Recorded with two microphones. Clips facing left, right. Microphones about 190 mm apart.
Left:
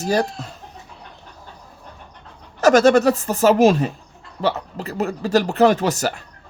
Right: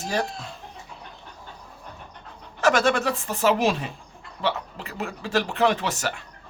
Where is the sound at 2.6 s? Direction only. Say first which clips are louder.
Left 8 dB; 40° left (ahead or behind).